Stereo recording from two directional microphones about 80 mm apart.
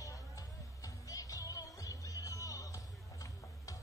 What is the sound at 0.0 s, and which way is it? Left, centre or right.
Music, left.